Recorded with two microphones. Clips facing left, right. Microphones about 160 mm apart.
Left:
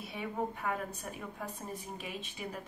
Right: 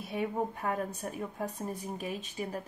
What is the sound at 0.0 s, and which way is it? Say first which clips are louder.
A woman's voice: right 4 dB; 45° right (ahead or behind).